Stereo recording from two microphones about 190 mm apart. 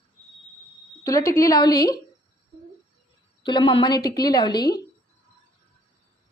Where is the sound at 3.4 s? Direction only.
25° left (ahead or behind).